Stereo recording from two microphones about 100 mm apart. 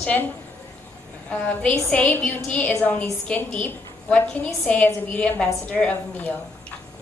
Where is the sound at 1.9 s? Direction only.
15° left (ahead or behind).